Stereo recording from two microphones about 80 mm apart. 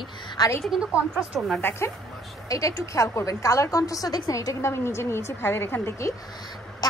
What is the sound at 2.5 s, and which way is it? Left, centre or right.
A woman's voice, left.